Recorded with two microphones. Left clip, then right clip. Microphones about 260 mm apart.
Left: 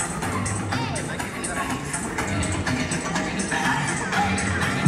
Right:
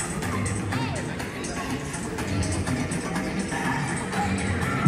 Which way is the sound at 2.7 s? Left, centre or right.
Centre.